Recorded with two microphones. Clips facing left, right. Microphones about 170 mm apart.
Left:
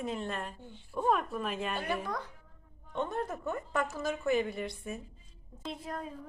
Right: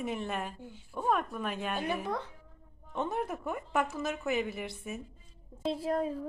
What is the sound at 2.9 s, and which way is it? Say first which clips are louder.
Speech: right 1 dB; 10° right (ahead or behind).